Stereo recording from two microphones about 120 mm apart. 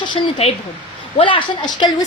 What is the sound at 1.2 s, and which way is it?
Speech, 45° left (ahead or behind).